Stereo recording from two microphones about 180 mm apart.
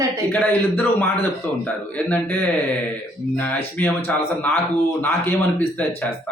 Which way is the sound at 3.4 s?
10° left (ahead or behind).